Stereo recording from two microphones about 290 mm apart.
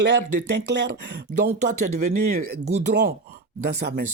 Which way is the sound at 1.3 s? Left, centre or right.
Right.